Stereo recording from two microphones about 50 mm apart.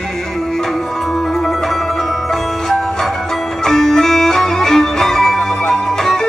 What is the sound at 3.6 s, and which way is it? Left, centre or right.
Music, centre.